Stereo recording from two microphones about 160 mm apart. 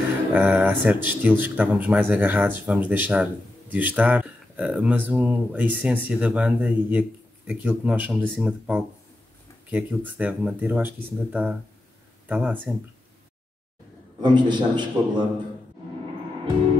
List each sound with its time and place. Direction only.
0.3 s speech: 10° right (ahead or behind)
14.2 s a man's voice: 30° right (ahead or behind)